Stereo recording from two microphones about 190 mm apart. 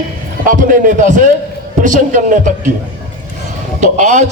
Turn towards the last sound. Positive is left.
turn(degrees=-40)  # may be behind; listen again after turning